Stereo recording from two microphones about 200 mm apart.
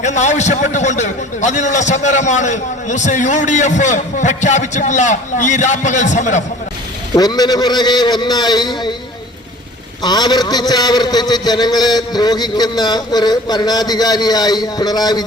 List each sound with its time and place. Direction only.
0.0 s a man's voice: 35° left (ahead or behind)
7.1 s a man's voice: 20° left (ahead or behind)
10.0 s a man's voice: 20° left (ahead or behind)